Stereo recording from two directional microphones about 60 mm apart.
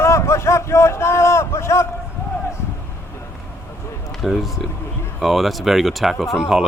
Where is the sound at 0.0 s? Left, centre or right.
Left.